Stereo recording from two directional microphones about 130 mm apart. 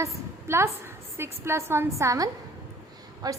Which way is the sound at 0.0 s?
20° right (ahead or behind).